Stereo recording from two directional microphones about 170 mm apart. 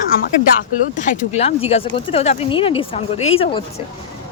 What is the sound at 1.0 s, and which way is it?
Speech, 45° left (ahead or behind).